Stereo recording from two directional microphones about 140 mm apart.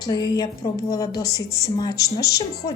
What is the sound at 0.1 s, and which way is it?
Speech, 25° left (ahead or behind).